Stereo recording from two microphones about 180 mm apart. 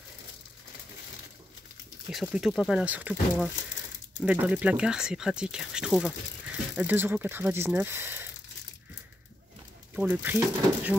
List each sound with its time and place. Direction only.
2.0 s speech: centre (ahead or behind)
9.9 s speech: 10° right (ahead or behind)